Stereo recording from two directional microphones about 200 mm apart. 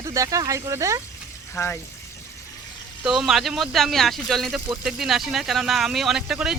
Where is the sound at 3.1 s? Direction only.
Centre (ahead or behind).